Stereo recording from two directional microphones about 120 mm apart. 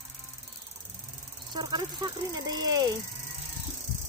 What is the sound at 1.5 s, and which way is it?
Speech, 40° right (ahead or behind).